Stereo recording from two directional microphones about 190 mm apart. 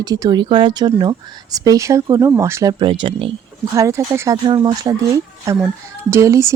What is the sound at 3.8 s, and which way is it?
Speech, 15° right (ahead or behind).